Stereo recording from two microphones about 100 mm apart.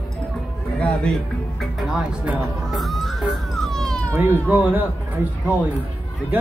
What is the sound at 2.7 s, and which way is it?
Police car, centre (ahead or behind).